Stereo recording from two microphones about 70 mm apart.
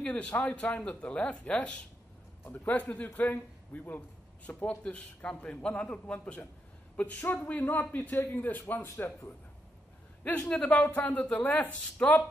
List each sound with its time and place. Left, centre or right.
0.0 s a man's voice: centre
10.4 s speech: centre